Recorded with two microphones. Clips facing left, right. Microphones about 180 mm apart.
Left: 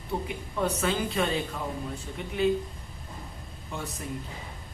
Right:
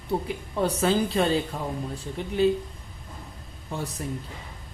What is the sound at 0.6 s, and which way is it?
Speech, 35° right (ahead or behind).